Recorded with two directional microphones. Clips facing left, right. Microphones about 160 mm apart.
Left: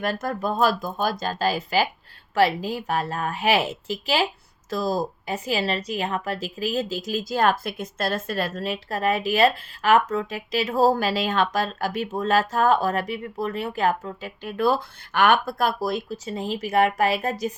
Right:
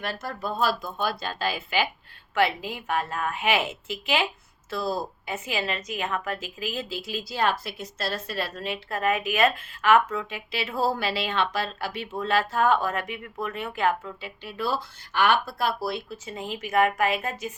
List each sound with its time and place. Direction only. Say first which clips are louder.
0.0 s a woman's voice: left 6 dB; 50° left (ahead or behind)